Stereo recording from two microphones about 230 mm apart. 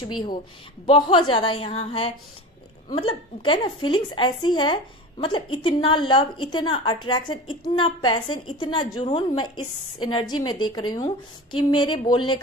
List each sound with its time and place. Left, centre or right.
0.8 s a woman's voice: left